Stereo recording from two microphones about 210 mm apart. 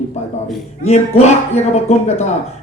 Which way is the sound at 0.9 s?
30° left (ahead or behind).